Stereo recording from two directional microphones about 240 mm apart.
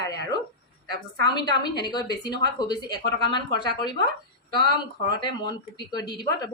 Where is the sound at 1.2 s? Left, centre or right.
Centre.